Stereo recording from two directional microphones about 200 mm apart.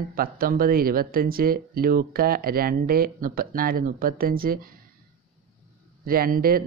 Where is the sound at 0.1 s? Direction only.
45° right (ahead or behind).